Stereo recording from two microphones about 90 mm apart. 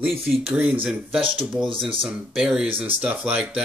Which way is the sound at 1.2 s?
70° right (ahead or behind).